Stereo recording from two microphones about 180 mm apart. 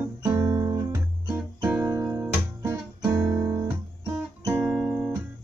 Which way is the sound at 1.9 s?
15° right (ahead or behind).